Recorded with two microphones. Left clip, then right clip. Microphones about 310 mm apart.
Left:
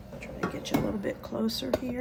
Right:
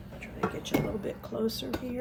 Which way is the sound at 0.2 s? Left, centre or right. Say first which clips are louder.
Right 1 dB; centre.